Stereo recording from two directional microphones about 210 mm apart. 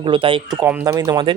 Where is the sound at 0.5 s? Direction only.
10° right (ahead or behind).